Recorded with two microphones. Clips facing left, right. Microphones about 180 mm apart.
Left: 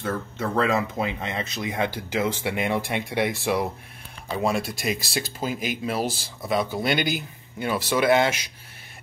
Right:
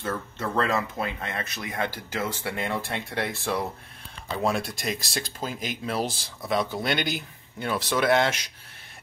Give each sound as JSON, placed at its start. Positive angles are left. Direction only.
{"t": 0.4, "sound": "speech", "side_deg": 15}
{"t": 4.4, "sound": "speech", "side_deg": 0}